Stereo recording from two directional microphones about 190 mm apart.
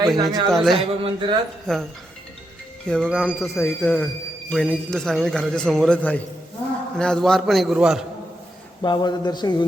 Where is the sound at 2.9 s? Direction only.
5° left (ahead or behind).